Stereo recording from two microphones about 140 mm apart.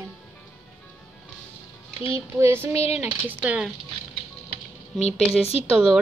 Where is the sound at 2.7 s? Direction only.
45° left (ahead or behind).